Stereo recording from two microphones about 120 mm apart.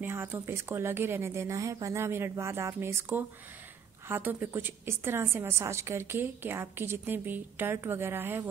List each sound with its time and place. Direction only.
0.0 s a woman's voice: 20° right (ahead or behind)
4.1 s a woman's voice: 15° right (ahead or behind)